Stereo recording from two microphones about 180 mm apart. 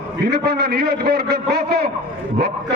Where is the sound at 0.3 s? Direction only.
65° right (ahead or behind).